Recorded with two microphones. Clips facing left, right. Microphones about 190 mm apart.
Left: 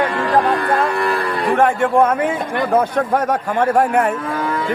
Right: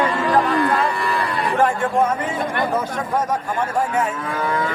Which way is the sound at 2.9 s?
65° left (ahead or behind).